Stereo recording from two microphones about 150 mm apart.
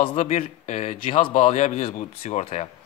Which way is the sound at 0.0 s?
40° left (ahead or behind).